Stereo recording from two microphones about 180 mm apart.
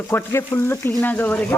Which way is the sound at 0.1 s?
15° left (ahead or behind).